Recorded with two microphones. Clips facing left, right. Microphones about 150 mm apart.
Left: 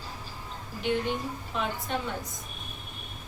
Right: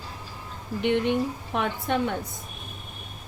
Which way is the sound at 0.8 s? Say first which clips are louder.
Right 6 dB; 65° right (ahead or behind).